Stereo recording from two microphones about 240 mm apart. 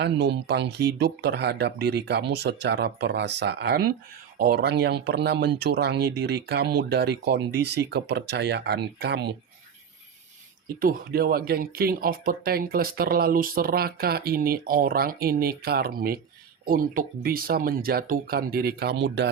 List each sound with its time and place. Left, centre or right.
0.0 s speech: right
10.8 s speech: right